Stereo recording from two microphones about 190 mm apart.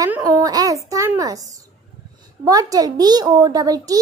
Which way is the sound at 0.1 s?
15° right (ahead or behind).